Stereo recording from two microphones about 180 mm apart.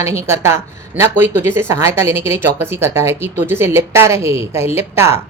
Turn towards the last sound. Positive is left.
turn(degrees=-15)  # may be behind; listen again after turning